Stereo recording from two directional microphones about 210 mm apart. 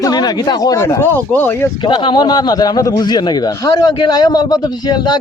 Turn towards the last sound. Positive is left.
turn(degrees=20)  # may be behind; listen again after turning